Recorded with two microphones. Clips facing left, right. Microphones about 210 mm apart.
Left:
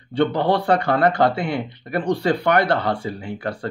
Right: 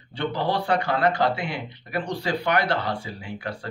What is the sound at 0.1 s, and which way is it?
Speech, 55° left (ahead or behind).